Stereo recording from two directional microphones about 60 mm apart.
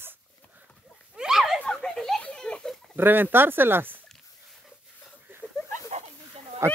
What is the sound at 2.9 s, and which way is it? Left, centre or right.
Speech, right.